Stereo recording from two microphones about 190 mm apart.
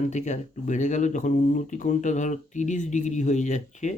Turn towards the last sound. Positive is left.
turn(degrees=40)  # may be behind; listen again after turning